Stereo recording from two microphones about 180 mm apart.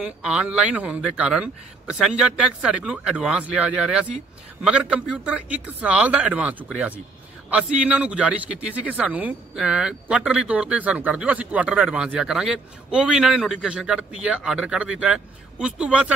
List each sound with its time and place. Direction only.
0.0 s speech: 5° right (ahead or behind)